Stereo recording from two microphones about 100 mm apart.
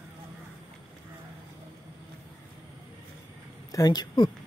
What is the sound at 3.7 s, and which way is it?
Speech, 40° left (ahead or behind).